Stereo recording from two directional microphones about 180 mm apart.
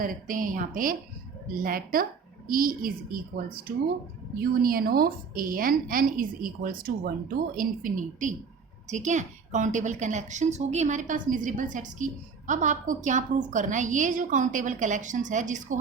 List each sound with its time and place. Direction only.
0.0 s a woman's voice: 50° right (ahead or behind)
4.4 s a woman's voice: 55° right (ahead or behind)